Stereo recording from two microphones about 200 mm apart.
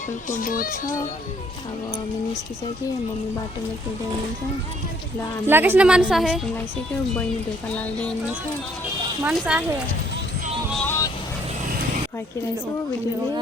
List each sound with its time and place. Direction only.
0.3 s speech: 40° left (ahead or behind)
5.5 s a woman's voice: 10° right (ahead or behind)
7.7 s speech: 5° left (ahead or behind)
9.2 s a woman's voice: 5° right (ahead or behind)
10.8 s vehicle: 10° left (ahead or behind)